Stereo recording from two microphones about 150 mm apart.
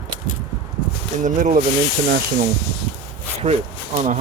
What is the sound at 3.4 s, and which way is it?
Speech, 50° right (ahead or behind).